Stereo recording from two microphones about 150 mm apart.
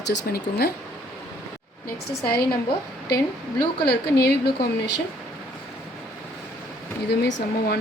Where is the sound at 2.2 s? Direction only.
90° left.